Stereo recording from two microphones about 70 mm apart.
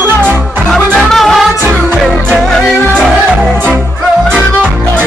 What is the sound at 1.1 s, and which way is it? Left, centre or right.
Music, centre.